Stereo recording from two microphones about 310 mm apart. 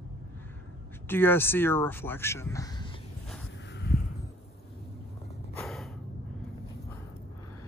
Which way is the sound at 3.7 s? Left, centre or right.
Left.